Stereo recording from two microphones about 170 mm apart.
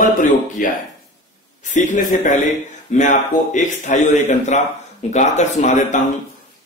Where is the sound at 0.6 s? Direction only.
55° left (ahead or behind).